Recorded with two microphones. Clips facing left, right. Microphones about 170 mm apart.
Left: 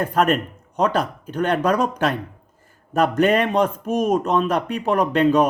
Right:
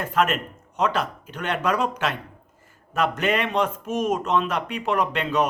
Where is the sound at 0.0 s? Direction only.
35° left (ahead or behind).